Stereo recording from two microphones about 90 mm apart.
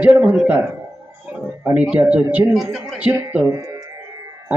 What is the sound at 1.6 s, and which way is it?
A woman's voice, 10° right (ahead or behind).